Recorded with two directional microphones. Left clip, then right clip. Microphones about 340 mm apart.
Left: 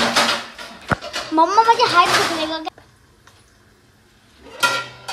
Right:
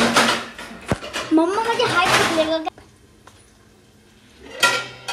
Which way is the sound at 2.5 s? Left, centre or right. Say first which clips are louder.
Right 4 dB; centre.